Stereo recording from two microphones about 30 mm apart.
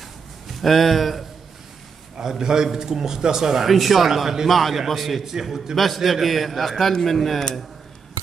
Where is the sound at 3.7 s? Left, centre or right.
Centre.